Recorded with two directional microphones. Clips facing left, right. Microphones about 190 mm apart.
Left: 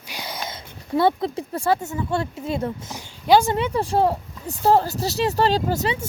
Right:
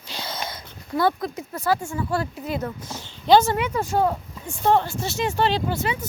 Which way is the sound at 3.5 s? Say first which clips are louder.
Left 2 dB; 30° left (ahead or behind).